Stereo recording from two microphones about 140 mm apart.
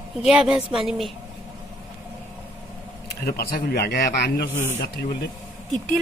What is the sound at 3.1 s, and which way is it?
Speech, 90° left.